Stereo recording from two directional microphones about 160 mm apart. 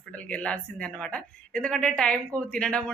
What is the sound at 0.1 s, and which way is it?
A woman's voice, 5° left (ahead or behind).